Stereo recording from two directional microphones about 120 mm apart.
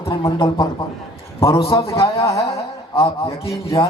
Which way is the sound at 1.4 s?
25° left (ahead or behind).